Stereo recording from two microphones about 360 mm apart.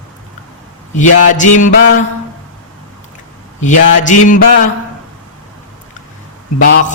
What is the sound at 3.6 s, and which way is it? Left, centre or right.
Mantra, left.